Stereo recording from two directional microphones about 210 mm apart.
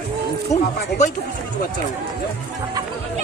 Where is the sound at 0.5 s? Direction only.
35° left (ahead or behind).